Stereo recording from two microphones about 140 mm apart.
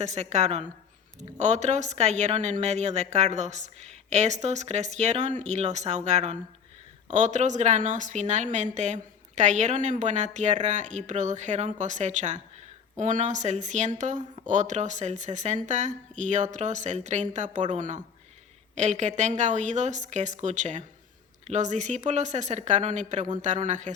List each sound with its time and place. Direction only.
0.0 s a woman's voice: 55° right (ahead or behind)